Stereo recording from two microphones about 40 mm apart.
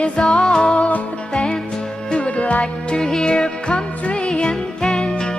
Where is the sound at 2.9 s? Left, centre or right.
Centre.